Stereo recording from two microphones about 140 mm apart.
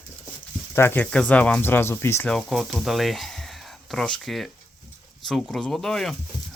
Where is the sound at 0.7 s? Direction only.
15° left (ahead or behind).